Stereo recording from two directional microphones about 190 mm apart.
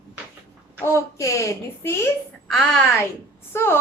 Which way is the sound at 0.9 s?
15° left (ahead or behind).